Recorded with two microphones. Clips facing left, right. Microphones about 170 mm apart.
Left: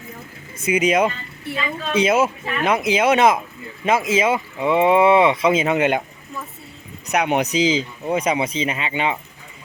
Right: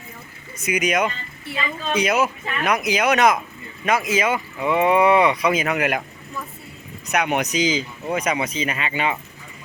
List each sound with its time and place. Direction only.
0.6 s speech: 30° left (ahead or behind)
7.1 s speech: 30° left (ahead or behind)